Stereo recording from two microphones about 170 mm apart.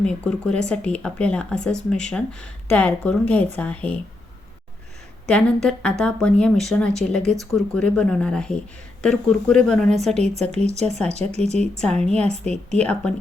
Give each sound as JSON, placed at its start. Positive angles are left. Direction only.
{"t": 0.0, "sound": "a woman's voice", "side_deg": 5}
{"t": 5.3, "sound": "speech", "side_deg": 5}
{"t": 10.2, "sound": "speech", "side_deg": -40}
{"t": 11.8, "sound": "a woman's voice", "side_deg": 5}